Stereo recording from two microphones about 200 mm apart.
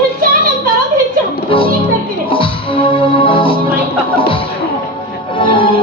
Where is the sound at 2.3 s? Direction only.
25° left (ahead or behind).